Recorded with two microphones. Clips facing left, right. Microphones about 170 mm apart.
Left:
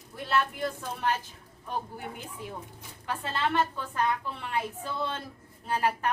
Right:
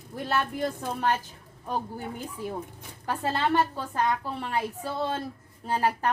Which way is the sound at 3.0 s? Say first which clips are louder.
Right 4 dB; 40° right (ahead or behind).